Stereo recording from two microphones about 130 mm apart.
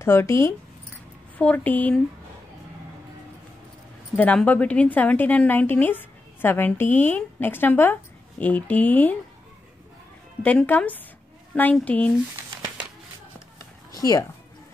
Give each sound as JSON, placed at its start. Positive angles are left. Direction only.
{"t": 0.0, "sound": "a woman's voice", "side_deg": 20}
{"t": 4.2, "sound": "a woman's voice", "side_deg": 10}
{"t": 10.4, "sound": "a woman's voice", "side_deg": 10}
{"t": 13.9, "sound": "speech", "side_deg": 30}